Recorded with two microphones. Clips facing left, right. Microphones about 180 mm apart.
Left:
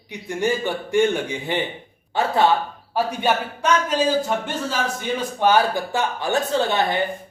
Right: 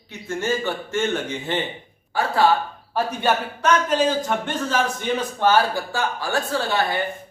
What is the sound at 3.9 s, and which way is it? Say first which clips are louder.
Speech: even; 10° left (ahead or behind).